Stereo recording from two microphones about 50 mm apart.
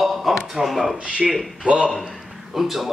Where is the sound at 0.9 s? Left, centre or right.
Right.